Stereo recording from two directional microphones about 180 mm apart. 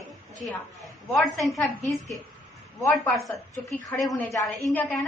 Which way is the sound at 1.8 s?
15° left (ahead or behind).